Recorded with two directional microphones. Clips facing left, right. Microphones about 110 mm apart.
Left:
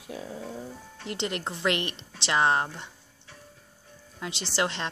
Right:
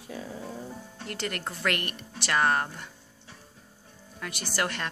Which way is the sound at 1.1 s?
20° left (ahead or behind).